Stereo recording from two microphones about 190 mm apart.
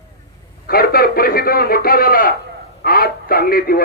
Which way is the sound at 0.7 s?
50° left (ahead or behind).